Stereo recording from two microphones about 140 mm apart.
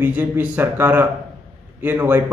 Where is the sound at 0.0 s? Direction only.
10° right (ahead or behind).